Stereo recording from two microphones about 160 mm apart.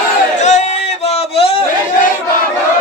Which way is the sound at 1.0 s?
40° left (ahead or behind).